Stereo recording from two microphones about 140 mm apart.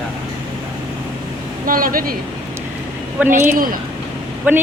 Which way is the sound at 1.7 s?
90° right.